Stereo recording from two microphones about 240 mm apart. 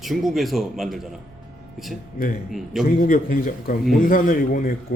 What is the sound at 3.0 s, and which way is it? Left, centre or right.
Speech, left.